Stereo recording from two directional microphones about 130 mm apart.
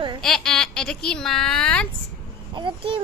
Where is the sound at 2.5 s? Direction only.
40° right (ahead or behind).